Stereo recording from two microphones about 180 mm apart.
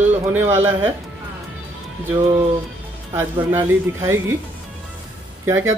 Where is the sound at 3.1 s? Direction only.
15° right (ahead or behind).